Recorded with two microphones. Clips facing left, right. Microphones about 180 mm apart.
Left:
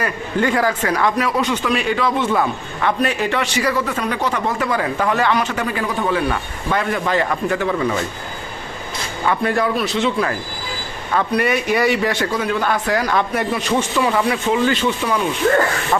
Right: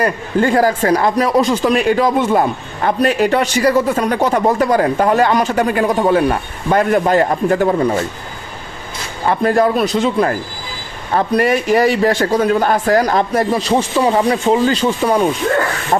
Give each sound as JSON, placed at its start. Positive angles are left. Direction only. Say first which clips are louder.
{"t": 0.0, "sound": "speech", "louder": "right 4 dB", "side_deg": -40}
{"t": 9.2, "sound": "speech", "louder": "right 5 dB", "side_deg": -40}
{"t": 15.9, "sound": "speech", "louder": "right 4 dB", "side_deg": -35}